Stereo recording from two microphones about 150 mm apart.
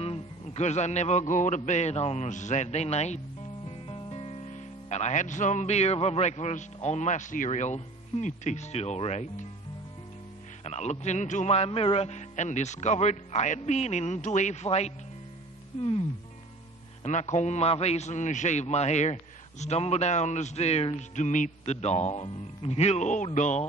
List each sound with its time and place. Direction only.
0.0 s a man's voice: 40° left (ahead or behind)
10.6 s a man's voice: 50° left (ahead or behind)
17.0 s a man's voice: 50° left (ahead or behind)